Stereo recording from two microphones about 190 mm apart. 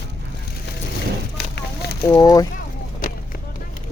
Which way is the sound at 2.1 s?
20° left (ahead or behind).